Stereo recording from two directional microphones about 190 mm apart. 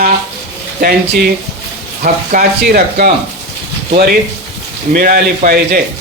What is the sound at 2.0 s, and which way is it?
Speech, 45° right (ahead or behind).